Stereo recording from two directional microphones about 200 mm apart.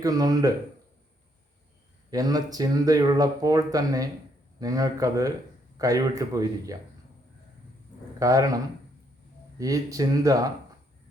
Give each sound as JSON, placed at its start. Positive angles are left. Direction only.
{"t": 0.0, "sound": "speech", "side_deg": -20}
{"t": 2.0, "sound": "speech", "side_deg": -20}
{"t": 8.2, "sound": "speech", "side_deg": -15}
{"t": 9.6, "sound": "speech", "side_deg": -15}